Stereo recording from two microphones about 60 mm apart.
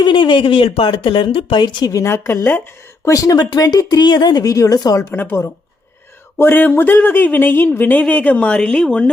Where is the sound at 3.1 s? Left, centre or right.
Left.